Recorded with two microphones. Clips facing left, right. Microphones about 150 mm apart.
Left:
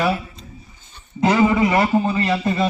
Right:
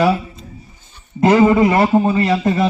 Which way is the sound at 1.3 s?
40° right (ahead or behind).